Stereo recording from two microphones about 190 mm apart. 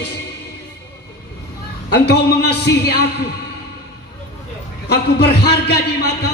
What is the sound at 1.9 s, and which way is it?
A man's voice, 60° left (ahead or behind).